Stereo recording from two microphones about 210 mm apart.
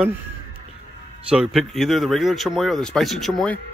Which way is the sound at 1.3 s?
Centre (ahead or behind).